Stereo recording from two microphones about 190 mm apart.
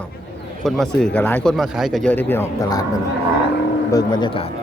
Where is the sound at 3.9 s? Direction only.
20° left (ahead or behind).